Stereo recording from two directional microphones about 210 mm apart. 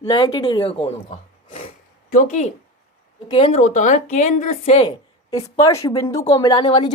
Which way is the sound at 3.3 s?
25° left (ahead or behind).